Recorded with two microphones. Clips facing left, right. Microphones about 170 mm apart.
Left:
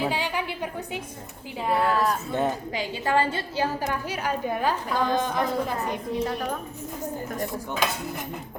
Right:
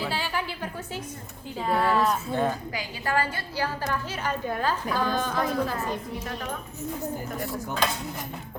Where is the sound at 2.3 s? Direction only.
20° left (ahead or behind).